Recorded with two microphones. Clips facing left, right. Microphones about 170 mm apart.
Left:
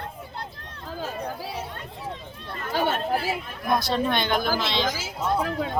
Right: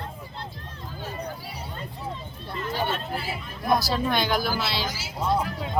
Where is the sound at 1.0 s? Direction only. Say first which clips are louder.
Left 3 dB; 90° left.